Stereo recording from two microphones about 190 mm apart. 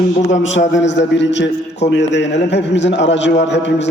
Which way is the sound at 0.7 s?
70° left (ahead or behind).